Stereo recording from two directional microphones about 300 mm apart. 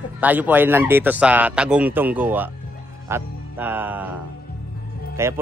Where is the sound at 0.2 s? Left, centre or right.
Centre.